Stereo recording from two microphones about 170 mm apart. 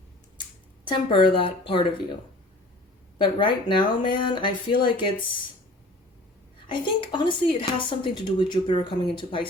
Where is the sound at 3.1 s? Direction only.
30° left (ahead or behind).